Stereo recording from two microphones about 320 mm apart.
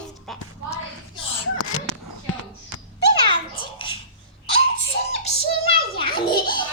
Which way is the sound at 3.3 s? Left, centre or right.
Centre.